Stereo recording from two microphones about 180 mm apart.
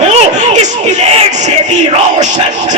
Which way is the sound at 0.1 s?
40° right (ahead or behind).